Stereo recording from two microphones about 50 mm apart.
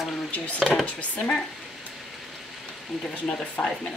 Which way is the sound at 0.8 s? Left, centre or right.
Left.